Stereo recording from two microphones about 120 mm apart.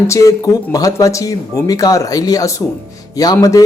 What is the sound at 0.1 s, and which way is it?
Speech, 30° left (ahead or behind).